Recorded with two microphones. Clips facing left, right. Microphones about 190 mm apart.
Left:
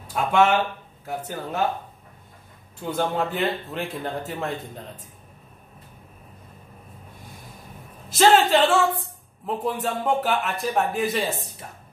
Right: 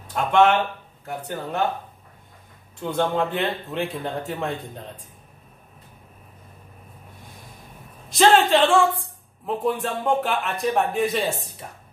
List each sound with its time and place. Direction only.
0.1 s speech: 5° left (ahead or behind)
2.8 s speech: 5° left (ahead or behind)
8.1 s a man's voice: centre (ahead or behind)